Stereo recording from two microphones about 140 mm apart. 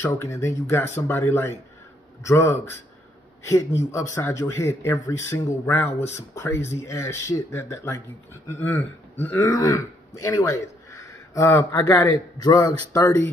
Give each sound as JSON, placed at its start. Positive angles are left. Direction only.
{"t": 0.0, "sound": "speech", "side_deg": 20}
{"t": 3.4, "sound": "speech", "side_deg": 20}
{"t": 12.4, "sound": "speech", "side_deg": 25}